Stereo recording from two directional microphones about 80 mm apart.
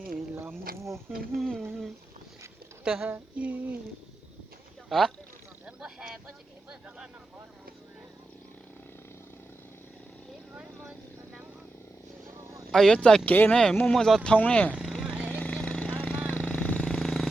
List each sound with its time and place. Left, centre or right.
0.8 s speech: right
1.4 s speech: centre
2.8 s speech: centre
3.1 s female singing: centre
4.9 s speech: centre
5.6 s a sound: centre
12.7 s speech: centre
13.2 s speech: left
13.5 s speech: centre
14.3 s speech: centre
14.8 s a sound: centre
15.3 s a sound: centre
16.3 s vehicle: centre